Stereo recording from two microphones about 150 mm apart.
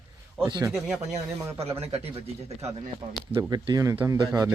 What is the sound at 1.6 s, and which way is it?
Speech, 40° right (ahead or behind).